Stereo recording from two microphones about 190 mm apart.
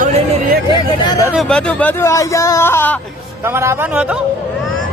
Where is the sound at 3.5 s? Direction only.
15° right (ahead or behind).